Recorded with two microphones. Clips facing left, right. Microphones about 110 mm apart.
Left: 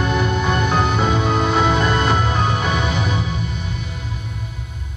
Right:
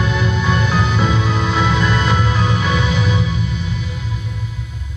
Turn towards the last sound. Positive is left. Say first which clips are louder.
# right 3 dB
turn(degrees=50)  # may be behind; listen again after turning